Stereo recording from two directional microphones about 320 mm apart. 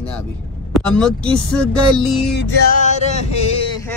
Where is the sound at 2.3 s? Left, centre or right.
Left.